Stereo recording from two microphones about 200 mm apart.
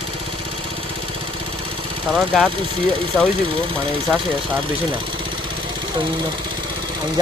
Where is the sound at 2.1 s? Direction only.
Centre (ahead or behind).